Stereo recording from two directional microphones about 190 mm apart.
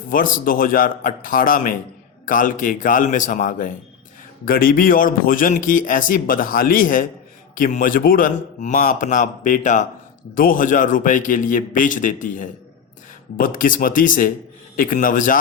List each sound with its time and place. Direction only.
0.1 s a man's voice: 45° left (ahead or behind)